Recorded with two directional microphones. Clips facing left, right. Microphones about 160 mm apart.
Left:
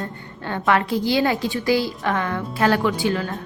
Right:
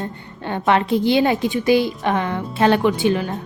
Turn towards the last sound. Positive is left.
turn(degrees=-20)  # may be behind; listen again after turning